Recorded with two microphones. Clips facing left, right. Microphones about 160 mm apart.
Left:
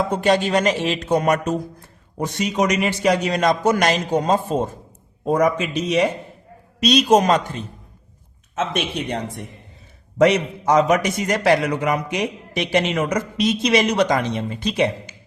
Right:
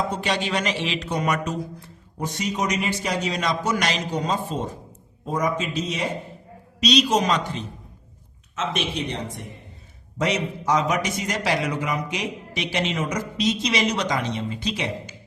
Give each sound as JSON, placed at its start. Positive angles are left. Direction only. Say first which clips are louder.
{"t": 0.1, "sound": "a man's voice", "louder": "left 7 dB", "side_deg": 50}
{"t": 2.1, "sound": "a man's voice", "louder": "left 5 dB", "side_deg": 70}
{"t": 5.2, "sound": "speech", "louder": "left 6 dB", "side_deg": 65}
{"t": 6.7, "sound": "a man's voice", "louder": "left 5 dB", "side_deg": 50}
{"t": 10.2, "sound": "a man's voice", "louder": "left 8 dB", "side_deg": 60}